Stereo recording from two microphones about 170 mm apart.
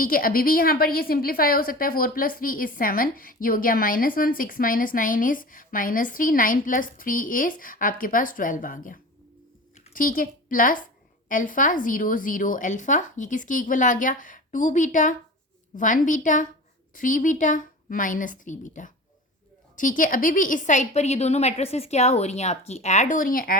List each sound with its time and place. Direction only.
0.0 s a woman's voice: 55° left (ahead or behind)